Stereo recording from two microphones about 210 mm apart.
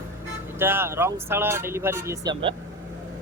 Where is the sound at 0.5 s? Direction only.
10° right (ahead or behind).